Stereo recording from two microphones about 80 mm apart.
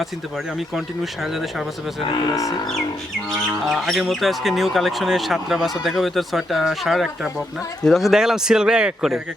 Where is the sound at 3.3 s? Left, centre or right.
Centre.